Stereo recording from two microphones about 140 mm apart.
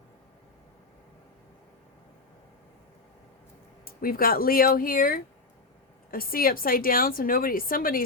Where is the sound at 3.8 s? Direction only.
90° left.